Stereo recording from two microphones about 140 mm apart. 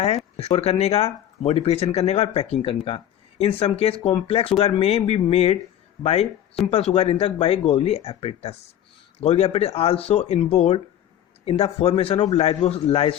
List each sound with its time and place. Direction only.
0.3 s speech: 50° left (ahead or behind)